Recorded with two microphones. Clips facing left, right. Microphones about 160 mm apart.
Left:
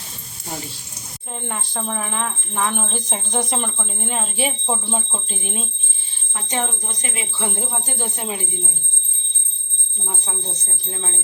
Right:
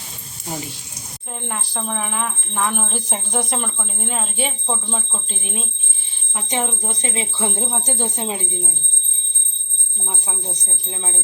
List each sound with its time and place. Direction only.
1.5 s speech: centre (ahead or behind)
5.4 s speech: centre (ahead or behind)
6.3 s speech: 20° right (ahead or behind)
10.1 s speech: 5° right (ahead or behind)
10.5 s speech: 15° right (ahead or behind)